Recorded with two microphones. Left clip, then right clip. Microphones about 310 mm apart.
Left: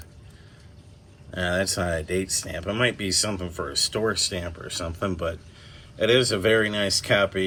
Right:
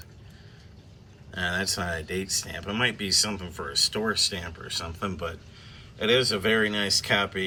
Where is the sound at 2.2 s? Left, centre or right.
Left.